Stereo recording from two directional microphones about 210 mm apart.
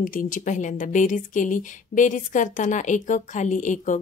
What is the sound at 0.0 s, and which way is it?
Speech, 40° left (ahead or behind).